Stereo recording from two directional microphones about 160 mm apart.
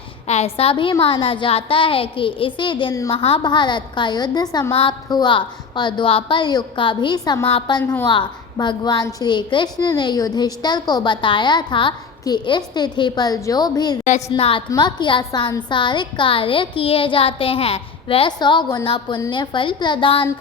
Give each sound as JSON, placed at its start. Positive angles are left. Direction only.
{"t": 0.3, "sound": "a woman's voice", "side_deg": 40}
{"t": 4.7, "sound": "a woman's voice", "side_deg": 35}
{"t": 14.3, "sound": "a woman's voice", "side_deg": 35}